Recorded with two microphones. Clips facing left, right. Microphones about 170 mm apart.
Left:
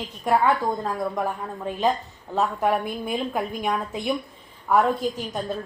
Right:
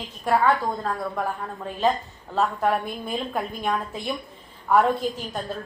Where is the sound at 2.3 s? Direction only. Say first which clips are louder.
Even; 10° left (ahead or behind).